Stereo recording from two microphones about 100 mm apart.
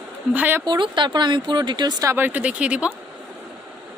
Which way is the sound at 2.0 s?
20° right (ahead or behind).